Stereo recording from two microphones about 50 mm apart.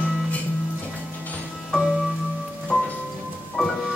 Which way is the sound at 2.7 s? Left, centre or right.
Left.